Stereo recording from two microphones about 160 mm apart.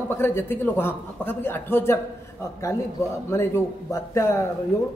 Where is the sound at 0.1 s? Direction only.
15° left (ahead or behind).